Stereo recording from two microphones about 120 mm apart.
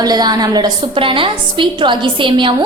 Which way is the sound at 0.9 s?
45° right (ahead or behind).